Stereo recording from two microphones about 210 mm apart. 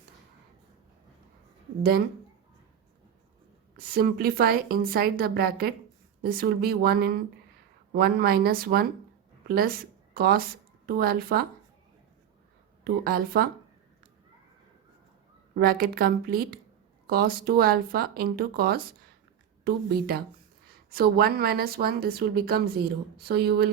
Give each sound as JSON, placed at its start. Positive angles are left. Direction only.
{"t": 3.8, "sound": "a woman's voice", "side_deg": -45}
{"t": 12.8, "sound": "a woman's voice", "side_deg": -45}
{"t": 15.5, "sound": "a woman's voice", "side_deg": -45}